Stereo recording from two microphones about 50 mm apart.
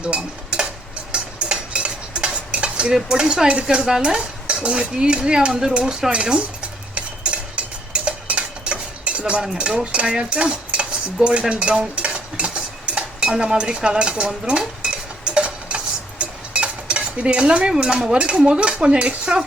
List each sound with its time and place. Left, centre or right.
0.0 s stir: centre
6.9 s a sound: right
9.8 s cutlery: right
14.4 s dishes: centre
15.4 s cutlery: right